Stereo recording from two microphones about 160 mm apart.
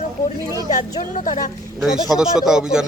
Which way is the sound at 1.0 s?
55° left (ahead or behind).